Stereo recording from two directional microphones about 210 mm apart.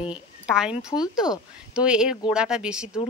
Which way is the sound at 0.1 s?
5° right (ahead or behind).